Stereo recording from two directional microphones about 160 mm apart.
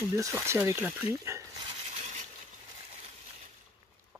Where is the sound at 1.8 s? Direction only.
50° right (ahead or behind).